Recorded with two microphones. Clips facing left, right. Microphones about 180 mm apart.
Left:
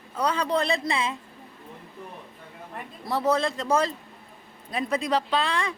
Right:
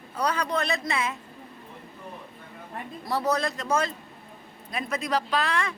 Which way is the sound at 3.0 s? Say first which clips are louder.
Left 2 dB; 25° left (ahead or behind).